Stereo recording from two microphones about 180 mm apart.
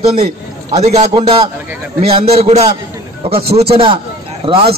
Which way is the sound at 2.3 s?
35° right (ahead or behind).